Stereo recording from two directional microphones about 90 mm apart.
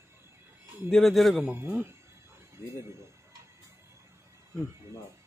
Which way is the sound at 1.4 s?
20° right (ahead or behind).